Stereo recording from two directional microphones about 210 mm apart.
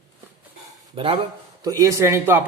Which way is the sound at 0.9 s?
25° right (ahead or behind).